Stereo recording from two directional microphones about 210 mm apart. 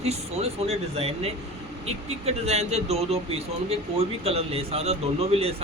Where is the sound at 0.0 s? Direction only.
30° right (ahead or behind).